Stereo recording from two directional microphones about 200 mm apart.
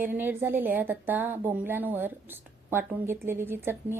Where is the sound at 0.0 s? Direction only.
10° right (ahead or behind).